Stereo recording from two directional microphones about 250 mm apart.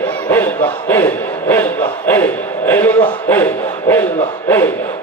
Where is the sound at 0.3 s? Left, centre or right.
Centre.